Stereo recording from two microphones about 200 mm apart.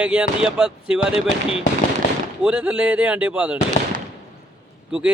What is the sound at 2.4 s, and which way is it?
Speech, 5° right (ahead or behind).